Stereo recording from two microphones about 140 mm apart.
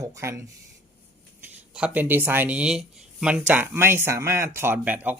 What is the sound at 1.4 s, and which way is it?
Speech, 10° right (ahead or behind).